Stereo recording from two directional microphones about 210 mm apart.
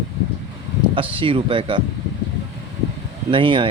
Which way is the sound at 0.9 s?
25° right (ahead or behind).